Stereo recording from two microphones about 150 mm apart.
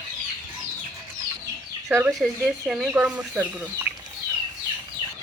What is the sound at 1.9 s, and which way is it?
Speech, 15° right (ahead or behind).